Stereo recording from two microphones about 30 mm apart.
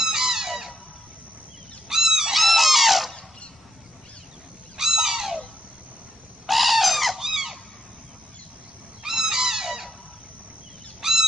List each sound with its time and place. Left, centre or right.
0.0 s music: centre
1.9 s goose: centre
2.3 s a sound: centre
4.7 s crow: centre
6.4 s bird: centre
7.2 s squeak: centre
9.0 s a sound: centre
11.0 s bird: centre